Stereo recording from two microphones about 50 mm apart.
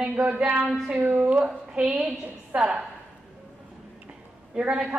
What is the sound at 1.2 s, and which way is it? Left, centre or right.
A man's voice, right.